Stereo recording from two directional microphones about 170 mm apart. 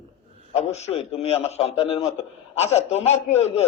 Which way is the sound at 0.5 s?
40° left (ahead or behind).